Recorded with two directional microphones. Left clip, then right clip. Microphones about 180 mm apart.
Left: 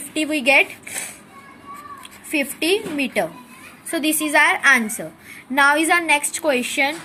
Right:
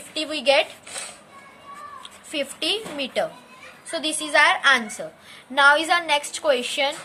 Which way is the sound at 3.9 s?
20° left (ahead or behind).